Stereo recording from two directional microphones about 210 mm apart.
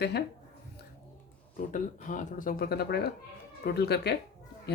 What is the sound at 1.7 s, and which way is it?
Speech, 35° left (ahead or behind).